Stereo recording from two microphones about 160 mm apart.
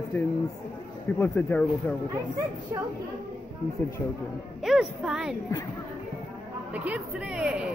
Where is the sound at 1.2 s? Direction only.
15° left (ahead or behind).